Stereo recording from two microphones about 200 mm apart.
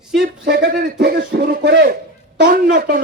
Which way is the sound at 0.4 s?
55° right (ahead or behind).